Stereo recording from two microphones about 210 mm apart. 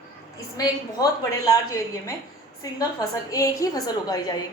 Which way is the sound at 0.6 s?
15° left (ahead or behind).